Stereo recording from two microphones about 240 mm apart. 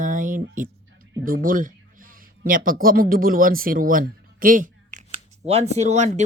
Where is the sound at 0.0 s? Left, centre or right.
Right.